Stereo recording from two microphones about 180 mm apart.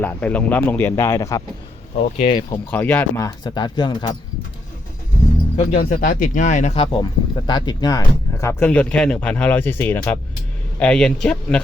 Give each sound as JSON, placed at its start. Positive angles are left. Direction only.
{"t": 0.0, "sound": "speech", "side_deg": 10}
{"t": 2.1, "sound": "speech", "side_deg": 35}
{"t": 2.6, "sound": "speech", "side_deg": 10}
{"t": 3.2, "sound": "speech", "side_deg": 20}
{"t": 5.5, "sound": "speech", "side_deg": 50}